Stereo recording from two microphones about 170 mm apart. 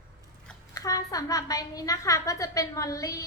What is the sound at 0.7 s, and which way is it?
A woman's voice, 20° left (ahead or behind).